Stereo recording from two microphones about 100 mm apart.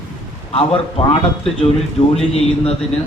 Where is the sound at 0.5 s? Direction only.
70° left (ahead or behind).